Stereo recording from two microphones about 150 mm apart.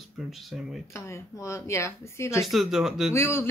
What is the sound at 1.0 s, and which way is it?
Speech, 20° left (ahead or behind).